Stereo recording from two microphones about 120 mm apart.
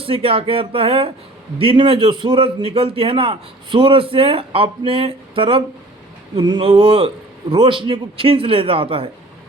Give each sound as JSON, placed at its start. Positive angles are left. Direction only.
{"t": 0.0, "sound": "speech", "side_deg": -50}